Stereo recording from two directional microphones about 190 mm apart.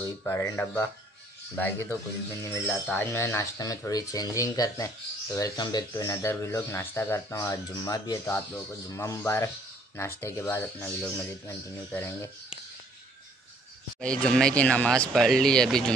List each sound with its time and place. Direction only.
0.0 s speech: 15° left (ahead or behind)
13.9 s speech: 5° left (ahead or behind)